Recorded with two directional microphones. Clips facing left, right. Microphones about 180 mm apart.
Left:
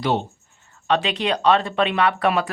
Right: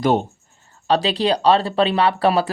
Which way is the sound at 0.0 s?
45° right (ahead or behind).